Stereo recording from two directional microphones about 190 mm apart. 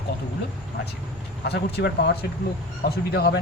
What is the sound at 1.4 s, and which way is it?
Speech, 60° left (ahead or behind).